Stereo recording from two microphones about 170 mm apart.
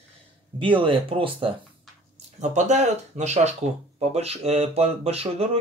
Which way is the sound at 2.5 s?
45° right (ahead or behind).